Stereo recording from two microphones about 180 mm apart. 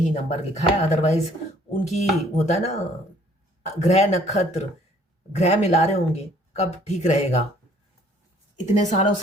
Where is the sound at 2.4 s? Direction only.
40° left (ahead or behind).